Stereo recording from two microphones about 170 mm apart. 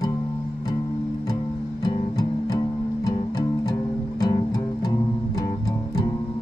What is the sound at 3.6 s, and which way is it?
Music, 20° left (ahead or behind).